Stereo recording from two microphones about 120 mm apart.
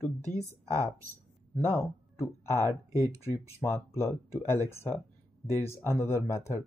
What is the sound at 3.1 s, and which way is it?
Speech, 20° left (ahead or behind).